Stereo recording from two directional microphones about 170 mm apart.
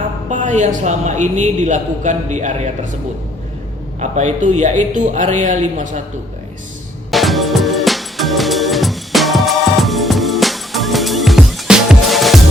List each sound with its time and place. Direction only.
0.3 s a man's voice: 45° right (ahead or behind)
4.0 s a man's voice: 45° right (ahead or behind)
7.1 s music: centre (ahead or behind)